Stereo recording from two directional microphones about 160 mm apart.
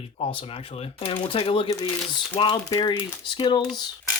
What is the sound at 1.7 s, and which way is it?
Speech, 20° left (ahead or behind).